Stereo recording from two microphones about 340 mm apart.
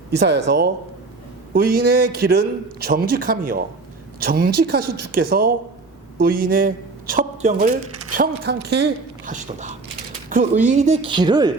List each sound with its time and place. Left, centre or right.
0.4 s a man's voice: right; by 11.5 s centre